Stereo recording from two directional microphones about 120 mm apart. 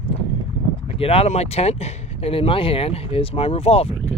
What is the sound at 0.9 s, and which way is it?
Speech, 55° left (ahead or behind).